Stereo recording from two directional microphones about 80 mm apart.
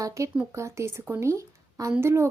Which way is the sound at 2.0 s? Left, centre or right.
Right.